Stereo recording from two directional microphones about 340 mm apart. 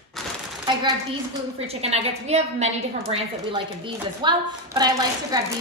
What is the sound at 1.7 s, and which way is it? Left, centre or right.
A woman's voice, centre.